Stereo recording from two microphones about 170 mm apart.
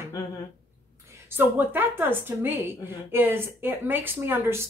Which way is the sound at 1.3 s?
10° right (ahead or behind).